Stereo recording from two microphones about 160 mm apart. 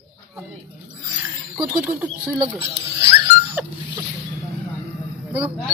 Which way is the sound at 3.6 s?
10° right (ahead or behind).